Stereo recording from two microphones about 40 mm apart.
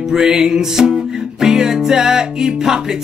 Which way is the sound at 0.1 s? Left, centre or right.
Centre.